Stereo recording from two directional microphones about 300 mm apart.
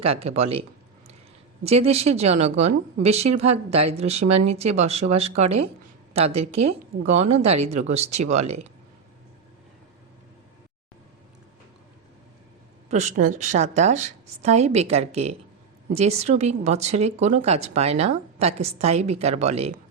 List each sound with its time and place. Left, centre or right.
0.0 s speech: centre
1.6 s speech: centre
12.9 s speech: right